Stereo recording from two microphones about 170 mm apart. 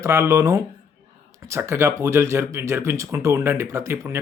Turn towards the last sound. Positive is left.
turn(degrees=-15)  # may be behind; listen again after turning